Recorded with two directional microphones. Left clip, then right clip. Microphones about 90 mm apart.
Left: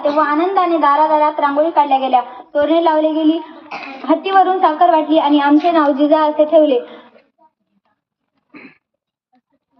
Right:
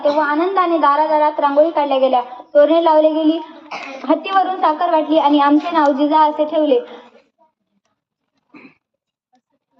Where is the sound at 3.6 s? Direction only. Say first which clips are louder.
Even; 10° right (ahead or behind).